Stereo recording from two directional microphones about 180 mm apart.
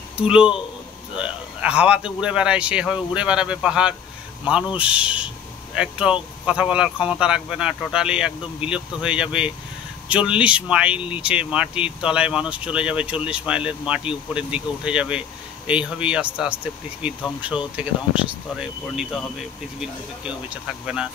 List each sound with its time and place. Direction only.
0.2 s speech: 5° right (ahead or behind)